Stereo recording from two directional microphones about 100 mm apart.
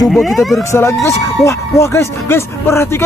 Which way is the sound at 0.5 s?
30° left (ahead or behind).